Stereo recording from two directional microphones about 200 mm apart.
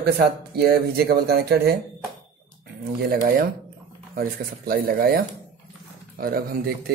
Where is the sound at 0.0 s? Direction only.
50° right (ahead or behind).